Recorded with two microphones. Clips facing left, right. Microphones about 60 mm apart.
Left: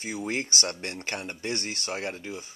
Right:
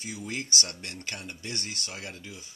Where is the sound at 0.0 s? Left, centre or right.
Left.